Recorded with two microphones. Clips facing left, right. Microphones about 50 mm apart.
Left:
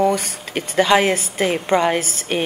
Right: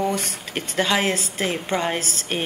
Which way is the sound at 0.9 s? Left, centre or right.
Left.